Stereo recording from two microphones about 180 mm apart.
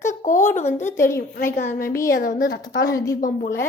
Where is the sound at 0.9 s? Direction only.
15° left (ahead or behind).